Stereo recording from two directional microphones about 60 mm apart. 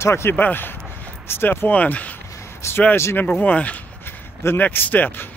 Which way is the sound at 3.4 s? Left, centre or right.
Left.